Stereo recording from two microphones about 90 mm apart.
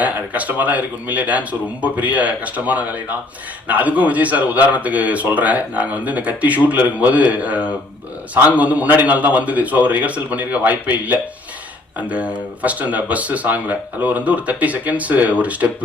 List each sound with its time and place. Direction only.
0.0 s speech: 15° right (ahead or behind)